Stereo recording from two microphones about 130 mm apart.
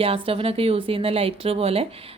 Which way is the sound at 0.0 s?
45° right (ahead or behind).